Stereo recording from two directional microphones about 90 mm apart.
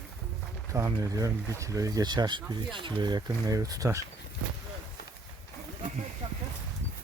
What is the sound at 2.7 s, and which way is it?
Speech, 65° right (ahead or behind).